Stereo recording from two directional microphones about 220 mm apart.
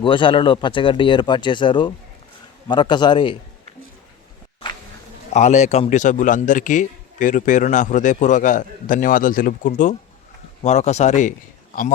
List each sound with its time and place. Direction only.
0.0 s speech: 20° left (ahead or behind)
5.3 s a man's voice: 30° left (ahead or behind)